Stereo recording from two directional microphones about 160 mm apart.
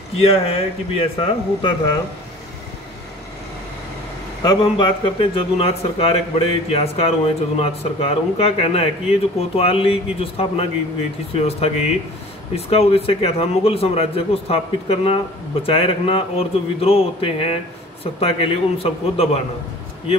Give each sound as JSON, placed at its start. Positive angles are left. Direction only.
{"t": 0.2, "sound": "speech", "side_deg": 35}
{"t": 4.4, "sound": "speech", "side_deg": 30}